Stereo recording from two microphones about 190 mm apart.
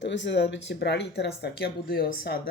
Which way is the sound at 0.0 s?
70° left (ahead or behind).